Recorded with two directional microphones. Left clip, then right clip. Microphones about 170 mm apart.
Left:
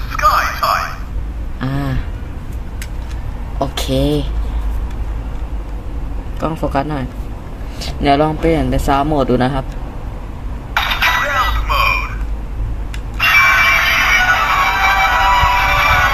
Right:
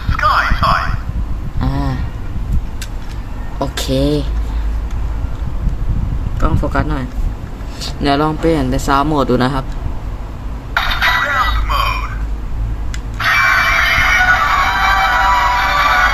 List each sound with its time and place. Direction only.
0.1 s a sound: 25° left (ahead or behind)
1.6 s a sound: 5° left (ahead or behind)
3.6 s speech: centre (ahead or behind)
6.4 s a man's voice: 10° left (ahead or behind)
10.8 s telephone: 15° left (ahead or behind)
13.1 s music: 15° left (ahead or behind)